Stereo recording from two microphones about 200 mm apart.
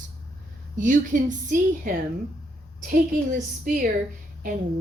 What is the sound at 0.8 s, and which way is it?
A woman's voice, 40° right (ahead or behind).